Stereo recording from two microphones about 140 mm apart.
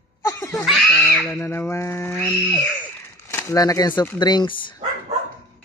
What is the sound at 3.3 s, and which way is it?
Speech, 20° left (ahead or behind).